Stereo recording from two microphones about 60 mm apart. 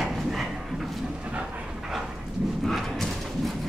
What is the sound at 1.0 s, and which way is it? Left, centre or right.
Dog, right.